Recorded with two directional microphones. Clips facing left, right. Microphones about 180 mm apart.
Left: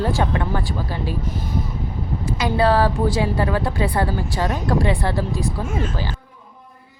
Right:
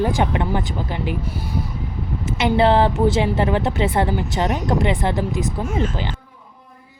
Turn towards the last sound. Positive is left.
turn(degrees=-20)  # may be behind; listen again after turning